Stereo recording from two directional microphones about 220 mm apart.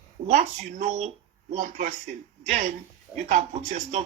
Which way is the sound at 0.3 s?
35° right (ahead or behind).